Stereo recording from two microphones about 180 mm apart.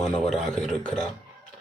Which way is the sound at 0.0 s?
5° left (ahead or behind).